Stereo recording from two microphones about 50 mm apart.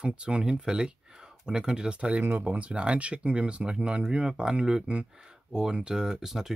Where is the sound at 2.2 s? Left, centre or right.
Right.